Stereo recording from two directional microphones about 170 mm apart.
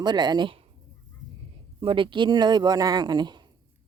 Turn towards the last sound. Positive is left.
turn(degrees=-25)  # may be behind; listen again after turning